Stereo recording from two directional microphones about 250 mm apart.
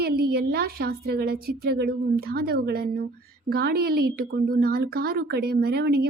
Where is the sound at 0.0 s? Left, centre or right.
Right.